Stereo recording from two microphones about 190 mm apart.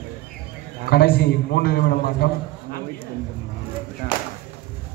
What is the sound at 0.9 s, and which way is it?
A man's voice, 55° left (ahead or behind).